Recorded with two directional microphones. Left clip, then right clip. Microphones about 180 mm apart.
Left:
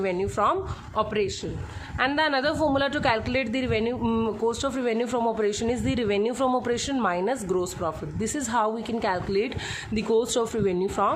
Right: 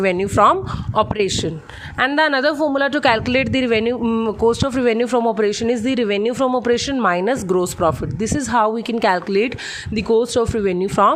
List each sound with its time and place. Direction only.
0.0 s a man's voice: 45° right (ahead or behind)
4.0 s a man's voice: 25° right (ahead or behind)